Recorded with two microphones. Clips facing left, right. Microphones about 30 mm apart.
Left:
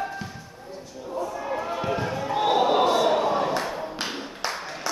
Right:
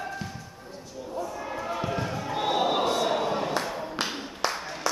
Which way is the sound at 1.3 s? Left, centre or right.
Centre.